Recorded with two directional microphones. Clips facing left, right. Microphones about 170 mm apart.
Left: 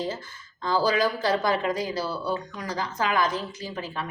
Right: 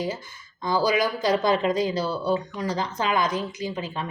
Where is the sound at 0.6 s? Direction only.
15° right (ahead or behind).